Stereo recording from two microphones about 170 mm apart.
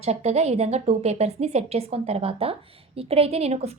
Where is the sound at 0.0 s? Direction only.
40° right (ahead or behind).